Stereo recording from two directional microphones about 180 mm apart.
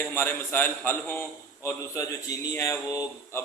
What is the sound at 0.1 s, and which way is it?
Speech, 10° left (ahead or behind).